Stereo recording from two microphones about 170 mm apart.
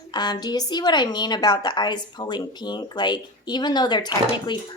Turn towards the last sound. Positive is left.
turn(degrees=25)  # may be behind; listen again after turning